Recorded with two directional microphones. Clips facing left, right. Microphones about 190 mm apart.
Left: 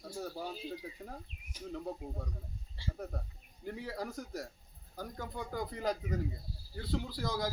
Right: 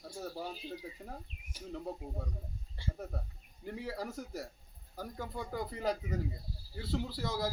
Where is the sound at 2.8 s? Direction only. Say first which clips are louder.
Right 1 dB; 50° right (ahead or behind).